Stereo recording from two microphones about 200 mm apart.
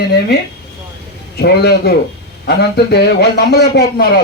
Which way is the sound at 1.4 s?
50° left (ahead or behind).